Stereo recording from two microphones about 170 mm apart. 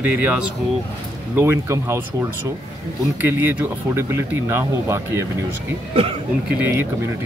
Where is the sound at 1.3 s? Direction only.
15° right (ahead or behind).